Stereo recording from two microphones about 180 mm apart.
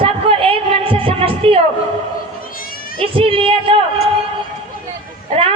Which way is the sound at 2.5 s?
50° left (ahead or behind).